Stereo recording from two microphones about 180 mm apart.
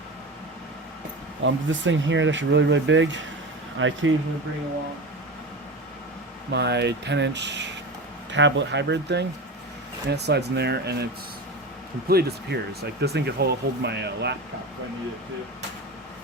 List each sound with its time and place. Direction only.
1.4 s speech: 90° right
6.5 s speech: 70° right (ahead or behind)